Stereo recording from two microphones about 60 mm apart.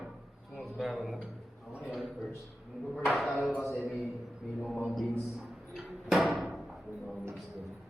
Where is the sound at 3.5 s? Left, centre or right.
Centre.